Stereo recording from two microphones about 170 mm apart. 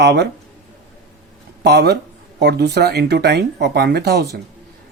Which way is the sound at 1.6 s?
75° right (ahead or behind).